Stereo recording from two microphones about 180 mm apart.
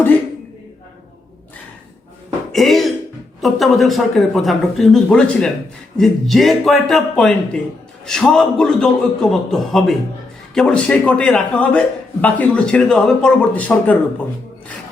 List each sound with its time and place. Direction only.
2.5 s music: centre (ahead or behind)
3.4 s a man's voice: centre (ahead or behind)